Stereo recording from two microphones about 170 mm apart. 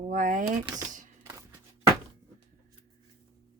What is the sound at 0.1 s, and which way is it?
Speech, 50° right (ahead or behind).